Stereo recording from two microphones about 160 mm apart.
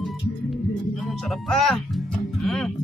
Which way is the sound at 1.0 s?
5° left (ahead or behind).